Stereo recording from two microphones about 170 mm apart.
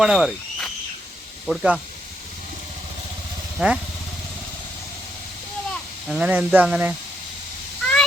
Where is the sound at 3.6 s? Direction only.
5° right (ahead or behind).